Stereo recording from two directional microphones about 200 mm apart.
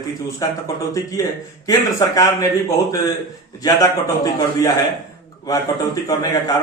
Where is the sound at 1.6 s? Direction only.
15° left (ahead or behind).